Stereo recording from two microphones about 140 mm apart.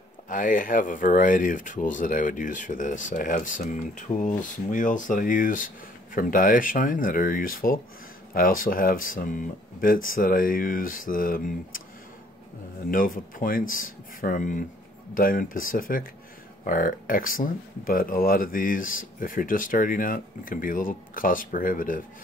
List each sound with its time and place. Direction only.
0.3 s speech: 70° left (ahead or behind)
12.9 s speech: 80° left
16.6 s speech: 75° left (ahead or behind)